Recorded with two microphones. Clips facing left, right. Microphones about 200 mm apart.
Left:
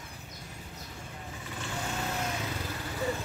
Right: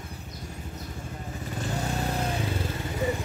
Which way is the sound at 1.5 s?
35° right (ahead or behind).